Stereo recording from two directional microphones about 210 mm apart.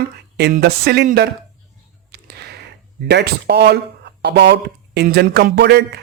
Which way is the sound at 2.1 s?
50° right (ahead or behind).